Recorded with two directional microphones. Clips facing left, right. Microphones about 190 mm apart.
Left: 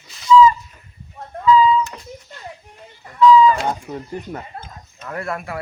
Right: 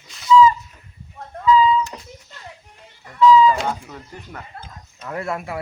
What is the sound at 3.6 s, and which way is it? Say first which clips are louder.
Speech: left 3 dB; 25° left (ahead or behind).